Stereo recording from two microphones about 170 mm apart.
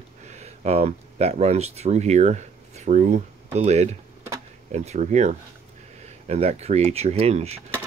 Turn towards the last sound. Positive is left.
turn(degrees=-35)  # may be behind; listen again after turning